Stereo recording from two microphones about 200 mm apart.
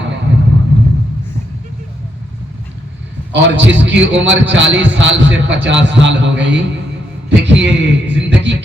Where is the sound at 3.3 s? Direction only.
60° right (ahead or behind).